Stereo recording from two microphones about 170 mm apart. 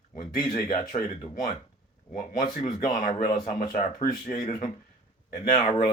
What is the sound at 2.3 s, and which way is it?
Speech, 55° left (ahead or behind).